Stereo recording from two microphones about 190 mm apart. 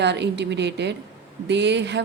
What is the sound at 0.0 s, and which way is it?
A woman's voice, 65° right (ahead or behind).